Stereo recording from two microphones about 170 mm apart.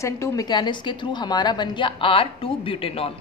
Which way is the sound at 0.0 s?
20° left (ahead or behind).